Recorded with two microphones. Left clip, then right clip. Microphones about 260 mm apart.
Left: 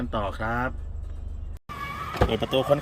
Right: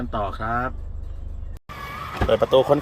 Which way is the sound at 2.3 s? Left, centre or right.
Centre.